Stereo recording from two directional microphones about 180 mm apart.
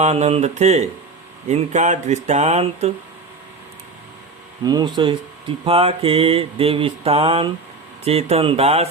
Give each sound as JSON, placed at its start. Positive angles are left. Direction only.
{"t": 0.0, "sound": "mantra", "side_deg": -35}
{"t": 4.6, "sound": "speech", "side_deg": -20}
{"t": 5.6, "sound": "mantra", "side_deg": -30}